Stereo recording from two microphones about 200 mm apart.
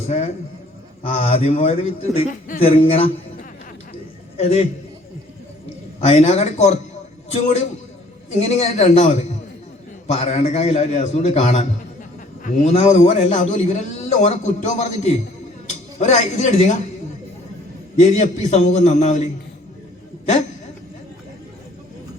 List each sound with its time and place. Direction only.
0.1 s a man's voice: 35° left (ahead or behind)
4.4 s a man's voice: 30° left (ahead or behind)
8.3 s a man's voice: 35° left (ahead or behind)
17.9 s a man's voice: 35° left (ahead or behind)